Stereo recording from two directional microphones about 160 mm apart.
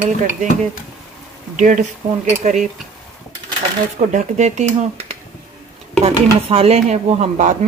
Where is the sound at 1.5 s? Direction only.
50° right (ahead or behind).